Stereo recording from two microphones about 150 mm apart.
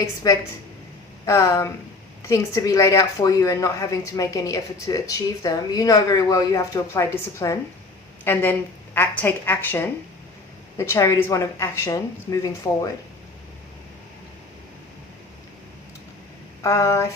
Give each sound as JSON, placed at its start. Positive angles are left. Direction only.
{"t": 0.0, "sound": "a woman's voice", "side_deg": 20}
{"t": 16.6, "sound": "speech", "side_deg": 20}